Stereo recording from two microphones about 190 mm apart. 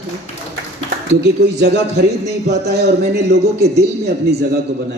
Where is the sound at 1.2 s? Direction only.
65° right (ahead or behind).